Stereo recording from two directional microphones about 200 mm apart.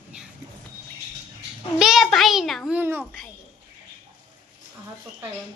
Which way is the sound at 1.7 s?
Centre (ahead or behind).